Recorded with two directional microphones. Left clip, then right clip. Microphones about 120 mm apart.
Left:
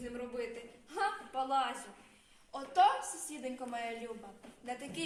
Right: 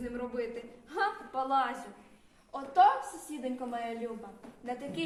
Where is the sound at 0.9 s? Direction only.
25° left (ahead or behind).